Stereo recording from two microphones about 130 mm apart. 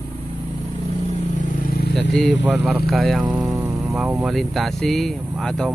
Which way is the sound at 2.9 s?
Centre (ahead or behind).